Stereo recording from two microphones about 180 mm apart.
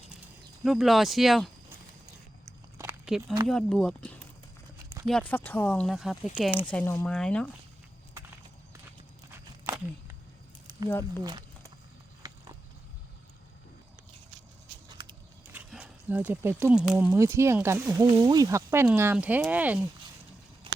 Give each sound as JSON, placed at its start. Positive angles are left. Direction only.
{"t": 0.6, "sound": "speech", "side_deg": 0}
{"t": 3.1, "sound": "speech", "side_deg": -5}
{"t": 6.7, "sound": "speech", "side_deg": 10}
{"t": 10.8, "sound": "speech", "side_deg": 10}
{"t": 11.2, "sound": "a sound", "side_deg": -20}
{"t": 14.8, "sound": "a sound", "side_deg": -25}
{"t": 15.5, "sound": "speech", "side_deg": -10}
{"t": 17.1, "sound": "speech", "side_deg": -15}